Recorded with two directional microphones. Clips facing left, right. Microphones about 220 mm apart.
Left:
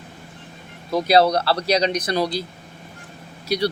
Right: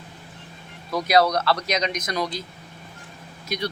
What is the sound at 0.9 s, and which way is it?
Speech, 30° left (ahead or behind).